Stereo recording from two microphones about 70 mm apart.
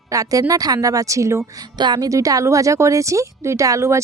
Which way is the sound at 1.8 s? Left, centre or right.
Right.